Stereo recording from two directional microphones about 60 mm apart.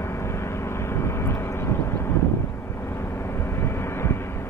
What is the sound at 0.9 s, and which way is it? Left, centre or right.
Vehicle, left.